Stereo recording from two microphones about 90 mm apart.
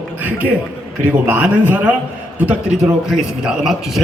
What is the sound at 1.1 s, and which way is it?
A man's voice, 20° right (ahead or behind).